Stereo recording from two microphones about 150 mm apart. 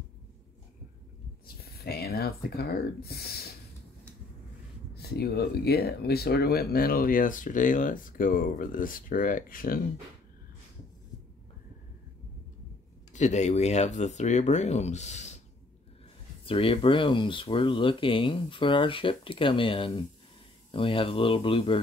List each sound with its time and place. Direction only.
1.6 s speech: 90° left
4.9 s speech: 90° left; by 9.8 s 70° left (ahead or behind)
13.1 s speech: 50° left (ahead or behind)
16.4 s speech: 35° left (ahead or behind)